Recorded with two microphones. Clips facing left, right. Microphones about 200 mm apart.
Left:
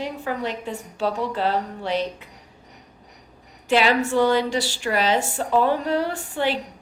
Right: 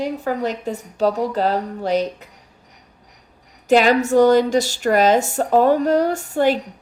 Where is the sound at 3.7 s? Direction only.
45° right (ahead or behind).